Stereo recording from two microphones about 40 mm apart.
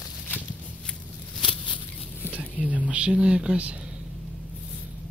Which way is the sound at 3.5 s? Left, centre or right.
Right.